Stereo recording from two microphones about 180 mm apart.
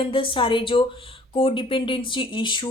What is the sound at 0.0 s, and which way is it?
Speech, 30° left (ahead or behind).